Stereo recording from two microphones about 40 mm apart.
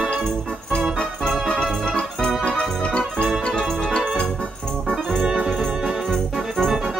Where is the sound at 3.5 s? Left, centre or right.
Centre.